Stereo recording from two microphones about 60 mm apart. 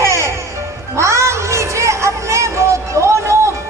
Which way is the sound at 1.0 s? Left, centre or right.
Right.